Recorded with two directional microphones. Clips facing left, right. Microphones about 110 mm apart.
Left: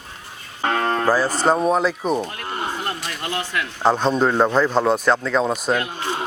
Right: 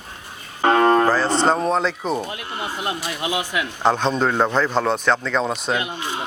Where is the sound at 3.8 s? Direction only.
5° left (ahead or behind).